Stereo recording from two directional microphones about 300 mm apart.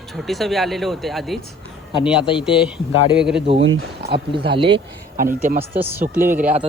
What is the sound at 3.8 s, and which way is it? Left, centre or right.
Speech, right.